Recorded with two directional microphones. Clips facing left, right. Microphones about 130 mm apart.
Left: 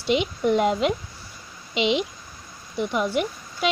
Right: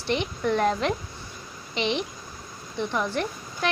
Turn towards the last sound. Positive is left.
turn(degrees=15)  # may be behind; listen again after turning